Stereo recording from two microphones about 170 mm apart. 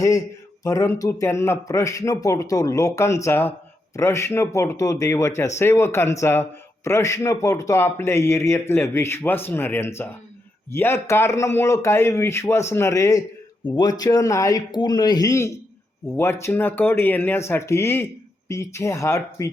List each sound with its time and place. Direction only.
0.6 s a man's voice: 15° left (ahead or behind)